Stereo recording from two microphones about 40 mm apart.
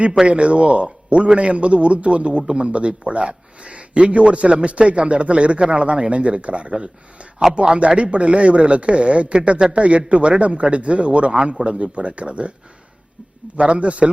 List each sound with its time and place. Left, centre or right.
0.3 s a man's voice: right
13.6 s speech: right